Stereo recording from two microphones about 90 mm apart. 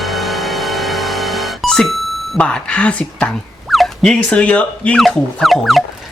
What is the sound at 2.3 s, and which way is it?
Speech, 15° left (ahead or behind).